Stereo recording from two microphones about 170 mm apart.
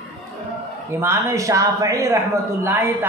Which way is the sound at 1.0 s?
20° right (ahead or behind).